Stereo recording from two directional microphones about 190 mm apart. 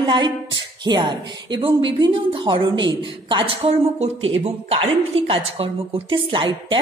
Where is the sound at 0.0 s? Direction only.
25° right (ahead or behind).